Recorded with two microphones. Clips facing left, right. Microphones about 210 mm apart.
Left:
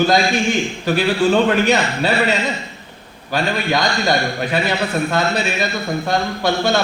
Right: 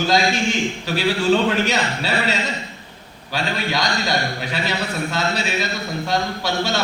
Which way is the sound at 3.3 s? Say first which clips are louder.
Left 4 dB; 55° left (ahead or behind).